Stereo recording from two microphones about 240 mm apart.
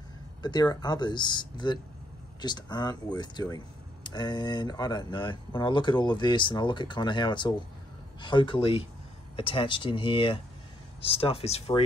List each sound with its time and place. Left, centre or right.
0.4 s speech: centre